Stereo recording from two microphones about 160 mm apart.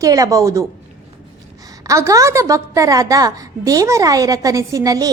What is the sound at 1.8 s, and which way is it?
A woman's voice, 20° right (ahead or behind).